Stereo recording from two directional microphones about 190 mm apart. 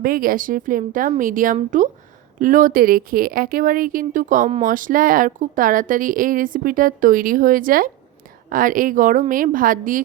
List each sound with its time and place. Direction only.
0.0 s speech: 50° right (ahead or behind)